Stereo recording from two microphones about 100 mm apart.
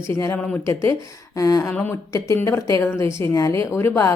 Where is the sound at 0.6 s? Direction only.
30° left (ahead or behind).